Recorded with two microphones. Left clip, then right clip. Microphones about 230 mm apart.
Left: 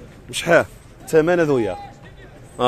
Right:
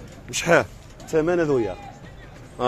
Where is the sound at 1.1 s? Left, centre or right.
Left.